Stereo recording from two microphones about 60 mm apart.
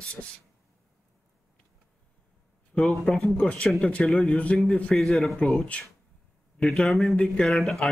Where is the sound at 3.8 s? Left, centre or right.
Left.